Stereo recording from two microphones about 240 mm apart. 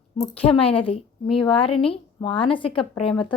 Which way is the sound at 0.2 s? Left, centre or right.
Left.